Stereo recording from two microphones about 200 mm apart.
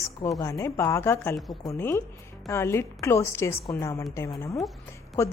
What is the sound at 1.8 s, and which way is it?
Speech, 10° left (ahead or behind).